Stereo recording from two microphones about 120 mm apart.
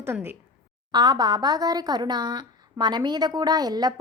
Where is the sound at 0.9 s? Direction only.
35° right (ahead or behind).